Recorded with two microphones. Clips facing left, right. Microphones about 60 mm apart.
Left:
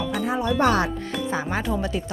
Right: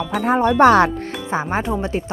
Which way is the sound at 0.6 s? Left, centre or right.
Right.